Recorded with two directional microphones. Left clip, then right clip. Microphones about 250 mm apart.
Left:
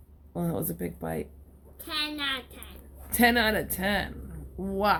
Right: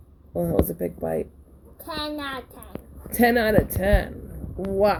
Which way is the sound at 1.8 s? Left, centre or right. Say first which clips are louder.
Right 1 dB; left.